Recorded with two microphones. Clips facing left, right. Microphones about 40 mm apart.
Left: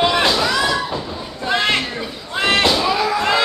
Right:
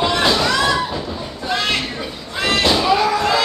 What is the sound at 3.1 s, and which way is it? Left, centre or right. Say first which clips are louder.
Children playing: even; left.